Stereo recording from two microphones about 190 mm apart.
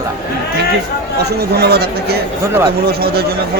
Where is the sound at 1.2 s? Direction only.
60° right (ahead or behind).